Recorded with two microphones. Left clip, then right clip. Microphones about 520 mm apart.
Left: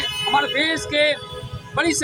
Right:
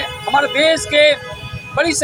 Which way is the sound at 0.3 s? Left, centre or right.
Left.